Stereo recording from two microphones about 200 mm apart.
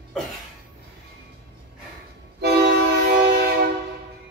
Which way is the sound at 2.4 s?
55° right (ahead or behind).